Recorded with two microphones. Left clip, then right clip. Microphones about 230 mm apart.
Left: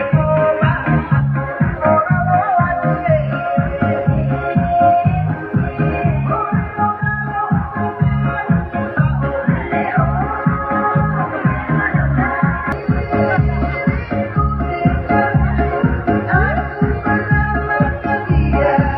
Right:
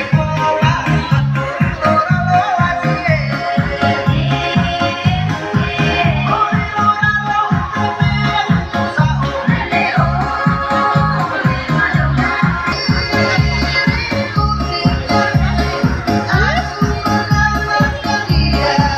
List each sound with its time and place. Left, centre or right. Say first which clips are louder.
0.1 s music: left 1 dB; right
1.9 s music: even; right